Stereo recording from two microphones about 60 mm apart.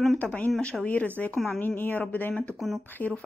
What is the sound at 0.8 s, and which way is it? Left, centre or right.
Speech, left.